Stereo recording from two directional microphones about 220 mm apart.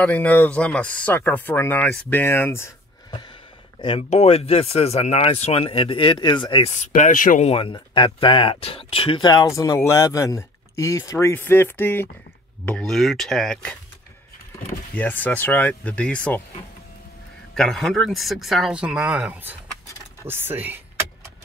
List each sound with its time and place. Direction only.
0.0 s speech: 5° left (ahead or behind)
15.0 s speech: 5° left (ahead or behind)
17.6 s speech: centre (ahead or behind)